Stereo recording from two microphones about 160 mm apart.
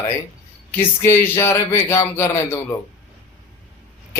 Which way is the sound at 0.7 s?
15° left (ahead or behind).